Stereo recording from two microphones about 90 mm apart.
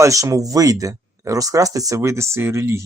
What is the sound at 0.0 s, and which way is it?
Speech, 35° right (ahead or behind).